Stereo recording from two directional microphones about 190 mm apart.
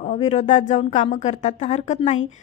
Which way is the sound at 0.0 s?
35° left (ahead or behind).